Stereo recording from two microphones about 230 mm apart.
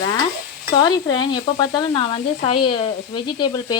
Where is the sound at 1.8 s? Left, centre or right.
Left.